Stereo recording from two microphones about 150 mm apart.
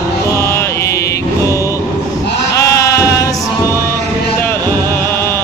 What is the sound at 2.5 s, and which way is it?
Sheep, 20° left (ahead or behind).